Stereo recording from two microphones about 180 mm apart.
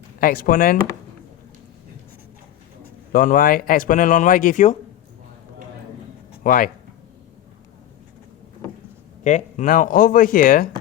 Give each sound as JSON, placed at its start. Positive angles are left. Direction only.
{"t": 0.2, "sound": "speech", "side_deg": 50}
{"t": 3.1, "sound": "speech", "side_deg": 50}
{"t": 6.4, "sound": "speech", "side_deg": 50}
{"t": 9.2, "sound": "speech", "side_deg": 45}